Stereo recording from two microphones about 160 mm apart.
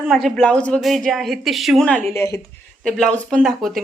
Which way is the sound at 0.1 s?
Centre (ahead or behind).